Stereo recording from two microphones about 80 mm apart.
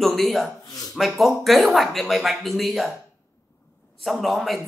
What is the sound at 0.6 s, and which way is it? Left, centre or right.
Speech, left.